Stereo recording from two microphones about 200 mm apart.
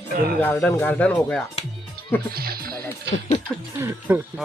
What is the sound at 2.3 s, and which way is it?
Speech, 50° right (ahead or behind).